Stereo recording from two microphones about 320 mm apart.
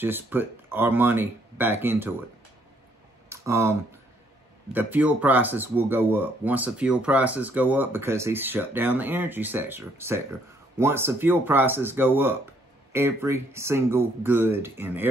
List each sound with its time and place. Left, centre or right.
0.0 s speech: centre
3.3 s a sound: centre
4.7 s speech: centre